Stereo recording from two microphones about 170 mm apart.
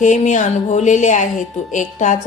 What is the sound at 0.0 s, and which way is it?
A woman's voice, 45° left (ahead or behind).